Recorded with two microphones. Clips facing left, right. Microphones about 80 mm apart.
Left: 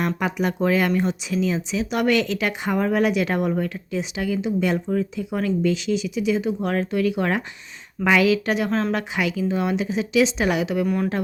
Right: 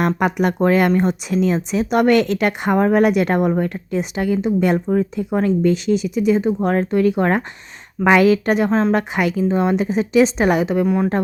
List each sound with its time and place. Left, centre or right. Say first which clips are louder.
0.0 s speech: right 5 dB; right
0.6 s speech: right 5 dB; right
8.7 s a woman's voice: right 6 dB; right
9.0 s a woman's voice: right 5 dB; right
10.8 s a woman's voice: right 5 dB; right